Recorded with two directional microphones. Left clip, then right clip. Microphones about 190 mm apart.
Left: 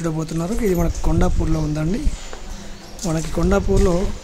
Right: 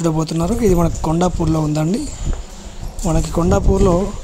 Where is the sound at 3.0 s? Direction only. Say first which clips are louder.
Right 4 dB; 20° right (ahead or behind).